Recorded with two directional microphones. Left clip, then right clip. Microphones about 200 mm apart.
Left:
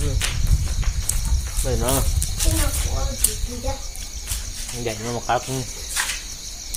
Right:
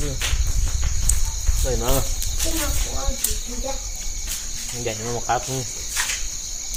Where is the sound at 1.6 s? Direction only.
25° left (ahead or behind).